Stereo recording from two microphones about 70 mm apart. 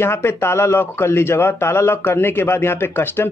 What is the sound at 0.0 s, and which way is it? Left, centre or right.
Speech, left.